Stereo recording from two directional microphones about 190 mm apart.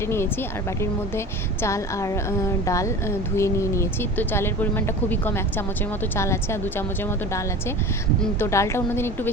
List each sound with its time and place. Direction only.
1.6 s speech: 15° left (ahead or behind)
8.2 s speech: 15° left (ahead or behind)